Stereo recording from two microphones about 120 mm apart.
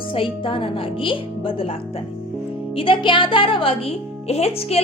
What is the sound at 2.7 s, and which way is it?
Speech, 45° left (ahead or behind).